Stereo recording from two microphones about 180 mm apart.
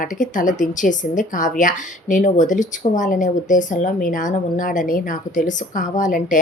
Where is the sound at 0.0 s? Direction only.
45° left (ahead or behind).